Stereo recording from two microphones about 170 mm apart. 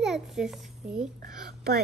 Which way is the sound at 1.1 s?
55° right (ahead or behind).